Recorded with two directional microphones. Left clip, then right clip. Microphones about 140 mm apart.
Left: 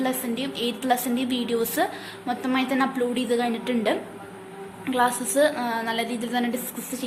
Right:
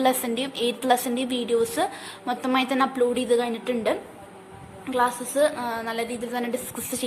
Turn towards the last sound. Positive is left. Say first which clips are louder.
# left 2 dB
turn(degrees=-15)  # may be behind; listen again after turning